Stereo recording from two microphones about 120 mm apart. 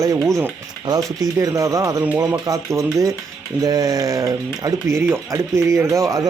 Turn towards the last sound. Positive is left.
turn(degrees=-30)  # may be behind; listen again after turning